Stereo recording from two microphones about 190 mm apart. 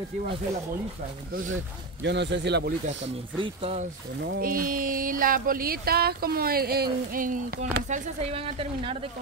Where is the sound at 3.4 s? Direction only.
30° right (ahead or behind).